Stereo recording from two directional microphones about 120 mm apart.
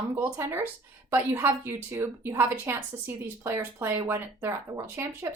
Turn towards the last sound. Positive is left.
turn(degrees=-20)  # may be behind; listen again after turning